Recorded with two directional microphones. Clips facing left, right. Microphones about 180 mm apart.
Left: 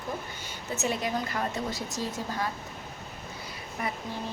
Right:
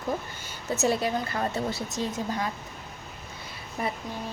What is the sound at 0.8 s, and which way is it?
A woman's voice, 35° right (ahead or behind).